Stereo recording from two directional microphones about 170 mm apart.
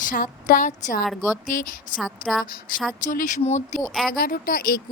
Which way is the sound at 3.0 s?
50° left (ahead or behind).